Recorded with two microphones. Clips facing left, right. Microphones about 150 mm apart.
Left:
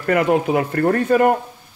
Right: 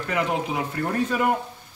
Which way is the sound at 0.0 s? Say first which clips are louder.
Left 8 dB; 60° left (ahead or behind).